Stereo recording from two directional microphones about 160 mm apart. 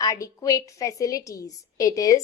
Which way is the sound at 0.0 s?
20° left (ahead or behind).